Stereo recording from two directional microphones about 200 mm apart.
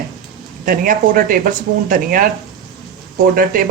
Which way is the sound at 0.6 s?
45° right (ahead or behind).